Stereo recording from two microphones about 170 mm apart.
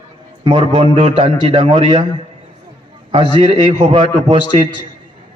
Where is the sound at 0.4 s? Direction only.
30° right (ahead or behind).